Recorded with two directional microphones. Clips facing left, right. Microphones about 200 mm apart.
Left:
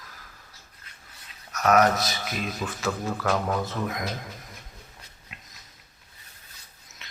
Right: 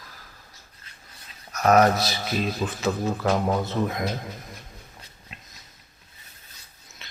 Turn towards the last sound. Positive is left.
turn(degrees=-30)  # may be behind; listen again after turning